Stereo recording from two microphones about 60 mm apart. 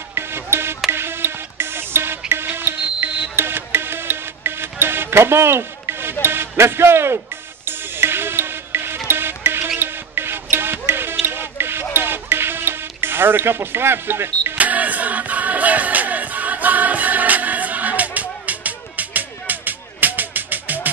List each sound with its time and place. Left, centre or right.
0.1 s music: right
6.2 s speech: right
7.6 s music: right
14.6 s music: right